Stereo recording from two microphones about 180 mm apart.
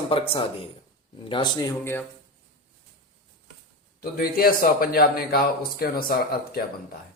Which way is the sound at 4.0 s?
55° left (ahead or behind).